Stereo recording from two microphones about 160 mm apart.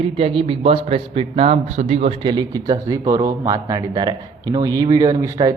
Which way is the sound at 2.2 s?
30° right (ahead or behind).